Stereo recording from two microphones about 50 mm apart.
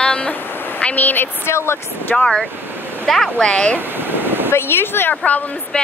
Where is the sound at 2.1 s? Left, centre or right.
Centre.